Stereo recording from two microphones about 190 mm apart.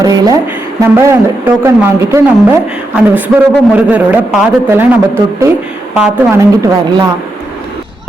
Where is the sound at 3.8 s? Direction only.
10° right (ahead or behind).